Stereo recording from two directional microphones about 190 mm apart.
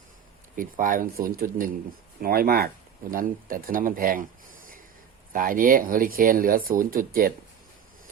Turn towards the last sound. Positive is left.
turn(degrees=-50)  # may be behind; listen again after turning